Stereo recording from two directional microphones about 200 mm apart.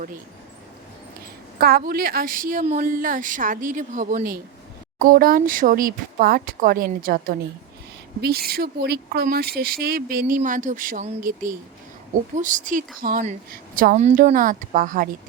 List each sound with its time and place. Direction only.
1.5 s a woman's voice: 50° right (ahead or behind)